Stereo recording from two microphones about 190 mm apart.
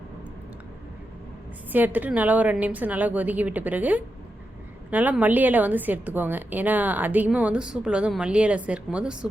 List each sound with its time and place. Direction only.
1.7 s a woman's voice: 10° right (ahead or behind)